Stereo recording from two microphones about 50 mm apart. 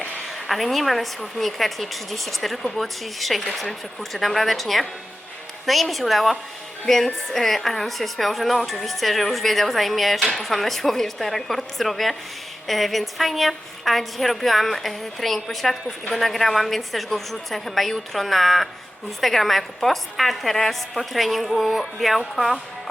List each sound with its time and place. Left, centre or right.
0.3 s a woman's voice: centre